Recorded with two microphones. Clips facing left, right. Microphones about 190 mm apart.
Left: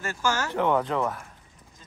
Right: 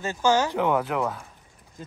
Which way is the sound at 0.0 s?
20° right (ahead or behind).